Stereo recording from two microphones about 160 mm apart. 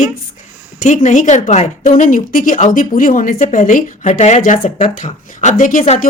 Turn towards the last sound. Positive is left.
turn(degrees=55)  # may be behind; listen again after turning